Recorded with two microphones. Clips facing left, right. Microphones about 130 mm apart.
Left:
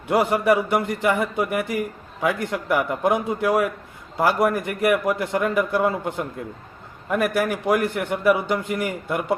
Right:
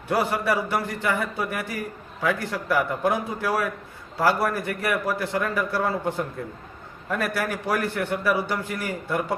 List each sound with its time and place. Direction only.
0.1 s a man's voice: 25° left (ahead or behind)